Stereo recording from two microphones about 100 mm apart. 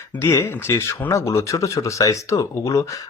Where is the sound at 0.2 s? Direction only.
35° left (ahead or behind).